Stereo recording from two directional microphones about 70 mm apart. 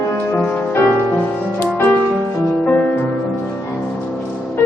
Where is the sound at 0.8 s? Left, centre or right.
Left.